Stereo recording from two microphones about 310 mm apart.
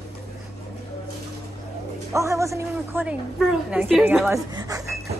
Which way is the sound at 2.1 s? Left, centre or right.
Centre.